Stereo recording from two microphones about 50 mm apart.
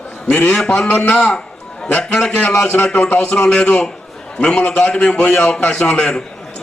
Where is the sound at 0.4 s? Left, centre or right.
Centre.